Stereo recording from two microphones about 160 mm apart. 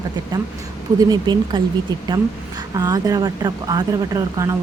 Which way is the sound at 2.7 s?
20° right (ahead or behind).